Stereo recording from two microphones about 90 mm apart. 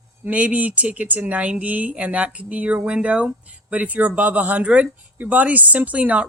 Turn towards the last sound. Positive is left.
turn(degrees=-15)  # may be behind; listen again after turning